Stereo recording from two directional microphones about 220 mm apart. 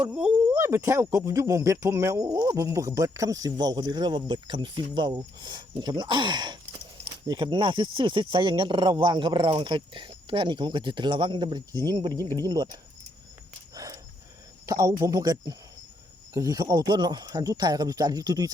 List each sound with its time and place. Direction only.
0.0 s speech: 5° right (ahead or behind)
14.7 s speech: 15° right (ahead or behind)